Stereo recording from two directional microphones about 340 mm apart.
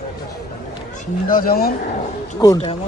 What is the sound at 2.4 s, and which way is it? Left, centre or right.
Speech, centre.